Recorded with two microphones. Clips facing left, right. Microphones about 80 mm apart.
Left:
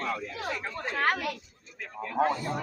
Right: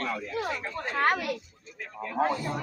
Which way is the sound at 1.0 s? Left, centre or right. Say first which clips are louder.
Right 2 dB; centre.